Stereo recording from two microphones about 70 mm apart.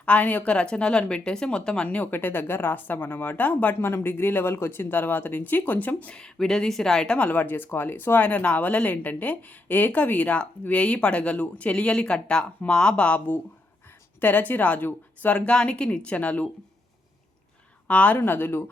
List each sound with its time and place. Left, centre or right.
0.0 s speech: left
6.1 s speech: centre
17.8 s speech: centre
18.2 s speech: left